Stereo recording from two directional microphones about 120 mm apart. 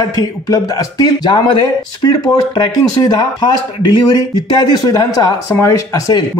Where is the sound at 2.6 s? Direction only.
35° left (ahead or behind).